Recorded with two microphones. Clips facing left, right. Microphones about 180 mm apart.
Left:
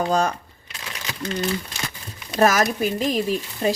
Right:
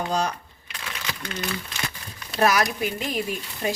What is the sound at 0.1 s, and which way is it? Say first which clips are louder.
Speech: left 3 dB; 50° left (ahead or behind).